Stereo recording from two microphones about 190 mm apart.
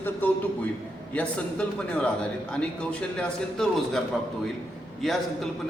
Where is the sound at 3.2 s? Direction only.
5° left (ahead or behind).